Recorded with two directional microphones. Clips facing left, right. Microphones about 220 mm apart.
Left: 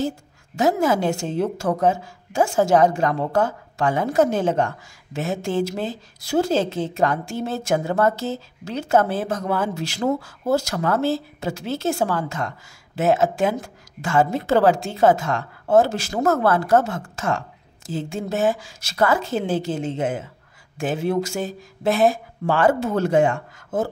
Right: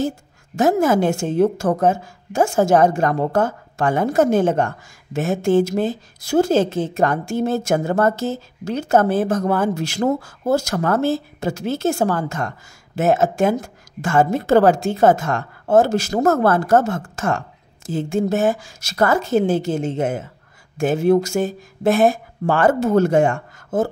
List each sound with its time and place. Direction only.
0.6 s a woman's voice: 45° right (ahead or behind)